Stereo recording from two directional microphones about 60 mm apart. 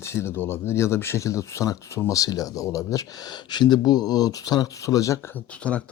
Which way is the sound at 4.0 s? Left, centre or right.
Left.